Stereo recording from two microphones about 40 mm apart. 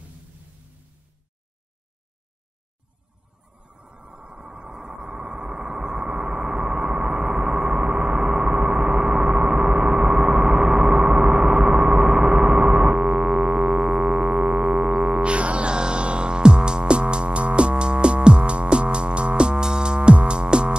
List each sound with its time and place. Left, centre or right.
3.5 s a sound: right
11.0 s music: right
13.7 s music: centre
14.2 s music: right